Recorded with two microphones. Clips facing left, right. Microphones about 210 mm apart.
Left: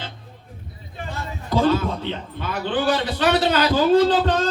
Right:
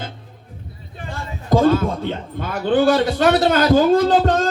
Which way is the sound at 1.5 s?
45° right (ahead or behind).